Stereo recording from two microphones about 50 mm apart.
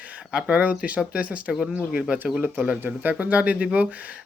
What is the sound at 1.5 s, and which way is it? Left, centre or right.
Speech, centre.